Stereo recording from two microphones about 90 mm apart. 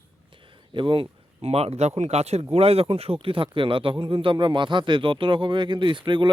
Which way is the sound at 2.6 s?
90° right.